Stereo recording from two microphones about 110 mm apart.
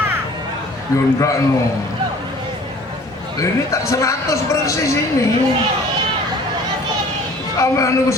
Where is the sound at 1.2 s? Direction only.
30° left (ahead or behind).